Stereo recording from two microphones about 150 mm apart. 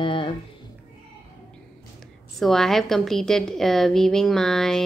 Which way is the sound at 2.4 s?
Centre (ahead or behind).